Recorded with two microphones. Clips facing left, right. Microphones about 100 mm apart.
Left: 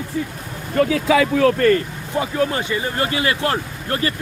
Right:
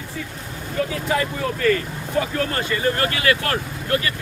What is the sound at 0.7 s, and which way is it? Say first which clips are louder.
Speech: left 7 dB; 80° left.